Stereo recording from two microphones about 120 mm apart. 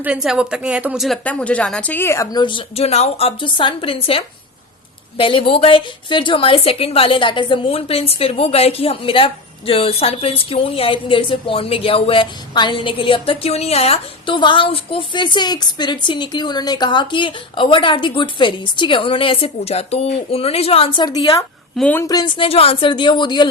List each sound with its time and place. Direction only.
0.0 s a woman's voice: 5° right (ahead or behind)
1.2 s a woman's voice: 10° left (ahead or behind)
2.3 s a woman's voice: 40° left (ahead or behind)
2.8 s a woman's voice: 60° left (ahead or behind)
14.3 s a woman's voice: 40° left (ahead or behind)
22.4 s speech: 55° left (ahead or behind)